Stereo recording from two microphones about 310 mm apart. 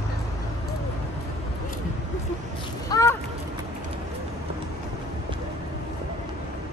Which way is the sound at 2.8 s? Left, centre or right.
Centre.